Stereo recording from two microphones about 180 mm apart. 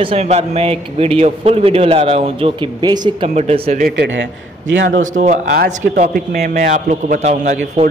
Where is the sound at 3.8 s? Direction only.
65° right (ahead or behind).